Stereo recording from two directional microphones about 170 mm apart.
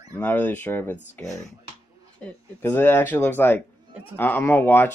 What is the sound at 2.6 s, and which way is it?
Speech, 15° left (ahead or behind).